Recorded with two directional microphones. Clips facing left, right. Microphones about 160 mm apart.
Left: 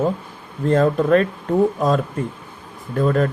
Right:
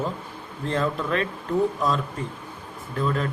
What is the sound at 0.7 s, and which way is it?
Speech, 45° left (ahead or behind).